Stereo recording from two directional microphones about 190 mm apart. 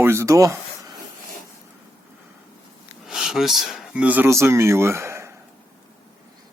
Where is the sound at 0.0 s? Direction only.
15° right (ahead or behind).